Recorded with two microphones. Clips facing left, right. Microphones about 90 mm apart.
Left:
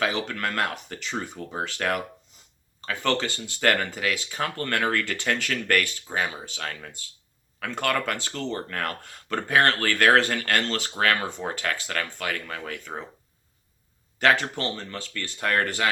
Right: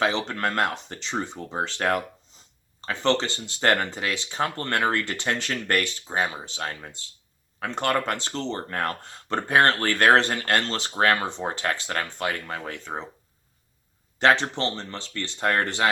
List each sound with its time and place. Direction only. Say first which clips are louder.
0.0 s speech: right 2 dB; 25° right (ahead or behind)
14.2 s speech: right 2 dB; 30° right (ahead or behind)